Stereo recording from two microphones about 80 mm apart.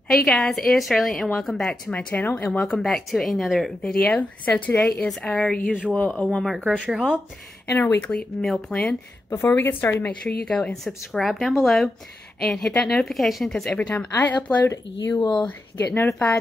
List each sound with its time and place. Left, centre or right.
0.1 s a woman's voice: centre
1.9 s speech: centre
2.6 s a woman's voice: centre
4.0 s speech: centre
4.7 s a woman's voice: centre
6.2 s a woman's voice: centre
6.6 s speech: centre
7.7 s speech: left
8.1 s speech: centre
9.3 s speech: left
10.2 s a woman's voice: centre
13.7 s speech: centre
15.1 s speech: left
15.4 s speech: left